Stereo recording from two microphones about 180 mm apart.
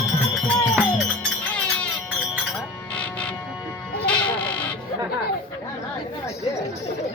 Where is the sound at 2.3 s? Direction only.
5° left (ahead or behind).